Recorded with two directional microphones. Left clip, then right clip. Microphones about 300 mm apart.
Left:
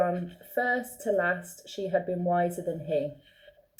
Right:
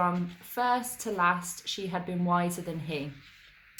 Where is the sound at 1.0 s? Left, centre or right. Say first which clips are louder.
Even; centre.